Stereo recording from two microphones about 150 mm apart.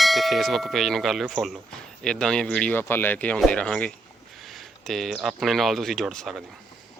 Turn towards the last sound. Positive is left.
turn(degrees=0)  # may be behind; listen again after turning